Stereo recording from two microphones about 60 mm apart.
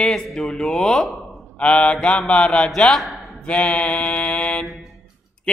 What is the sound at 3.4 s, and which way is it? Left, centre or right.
Mantra, centre.